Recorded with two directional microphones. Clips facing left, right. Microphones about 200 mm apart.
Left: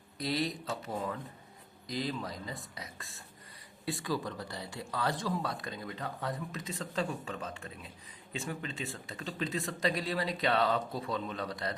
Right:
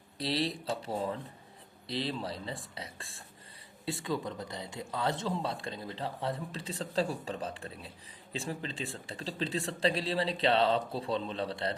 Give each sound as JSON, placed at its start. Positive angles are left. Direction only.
{"t": 0.2, "sound": "speech", "side_deg": -30}